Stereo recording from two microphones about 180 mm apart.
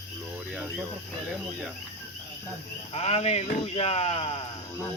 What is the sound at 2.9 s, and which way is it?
Speech, 35° left (ahead or behind).